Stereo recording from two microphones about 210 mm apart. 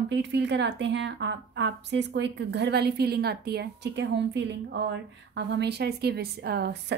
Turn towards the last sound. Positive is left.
turn(degrees=-50)  # may be behind; listen again after turning